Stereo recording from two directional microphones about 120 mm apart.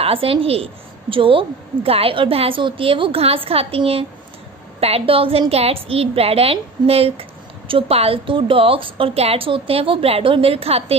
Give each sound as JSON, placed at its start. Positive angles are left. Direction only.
{"t": 0.0, "sound": "a woman's voice", "side_deg": -50}